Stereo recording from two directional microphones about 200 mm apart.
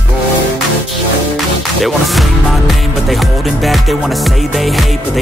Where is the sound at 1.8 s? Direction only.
Centre (ahead or behind).